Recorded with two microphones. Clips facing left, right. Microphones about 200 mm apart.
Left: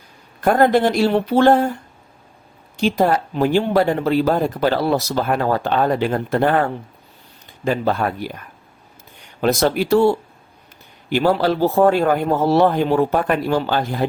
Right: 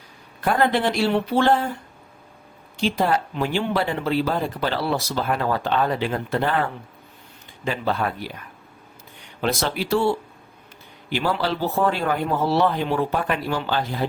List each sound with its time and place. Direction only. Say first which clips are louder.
0.4 s speech: left 6 dB; 45° left (ahead or behind)
2.7 s speech: left 4 dB; 45° left (ahead or behind)
9.4 s speech: left 7 dB; 45° left (ahead or behind)